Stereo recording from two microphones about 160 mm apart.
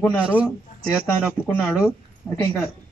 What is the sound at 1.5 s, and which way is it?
Speech, 15° left (ahead or behind).